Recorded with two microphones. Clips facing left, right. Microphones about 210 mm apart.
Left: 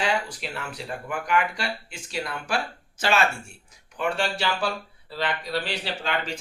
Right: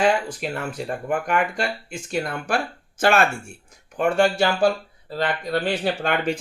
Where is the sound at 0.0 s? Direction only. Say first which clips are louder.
Right 6 dB; 50° right (ahead or behind).